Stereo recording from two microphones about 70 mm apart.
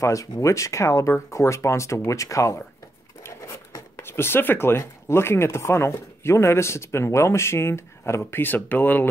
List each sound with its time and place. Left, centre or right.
0.0 s speech: left
4.0 s speech: left